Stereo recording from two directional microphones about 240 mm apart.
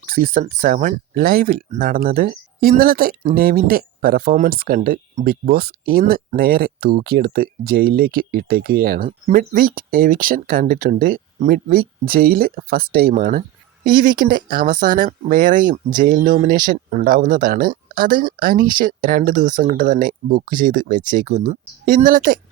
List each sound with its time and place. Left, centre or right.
0.0 s speech: right